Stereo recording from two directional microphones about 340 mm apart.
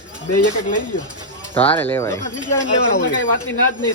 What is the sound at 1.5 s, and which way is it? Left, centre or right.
Speech, centre.